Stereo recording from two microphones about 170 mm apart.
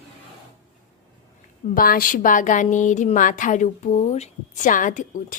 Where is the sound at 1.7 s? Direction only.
55° left (ahead or behind).